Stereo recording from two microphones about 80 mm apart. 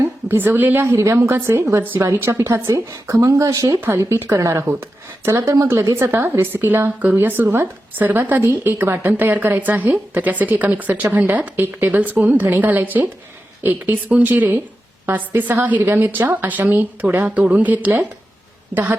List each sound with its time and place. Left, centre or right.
0.3 s a woman's voice: right
2.6 s speech: right
3.8 s speech: right
4.6 s a woman's voice: right